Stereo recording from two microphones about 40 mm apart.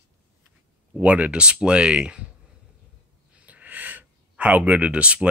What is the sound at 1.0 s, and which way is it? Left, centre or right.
Speech, right.